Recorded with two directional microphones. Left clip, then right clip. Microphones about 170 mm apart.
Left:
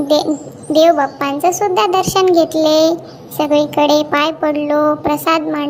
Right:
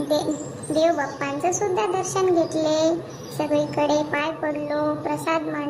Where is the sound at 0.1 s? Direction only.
35° left (ahead or behind).